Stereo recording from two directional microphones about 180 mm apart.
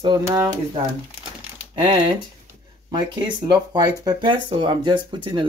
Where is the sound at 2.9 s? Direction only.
25° right (ahead or behind).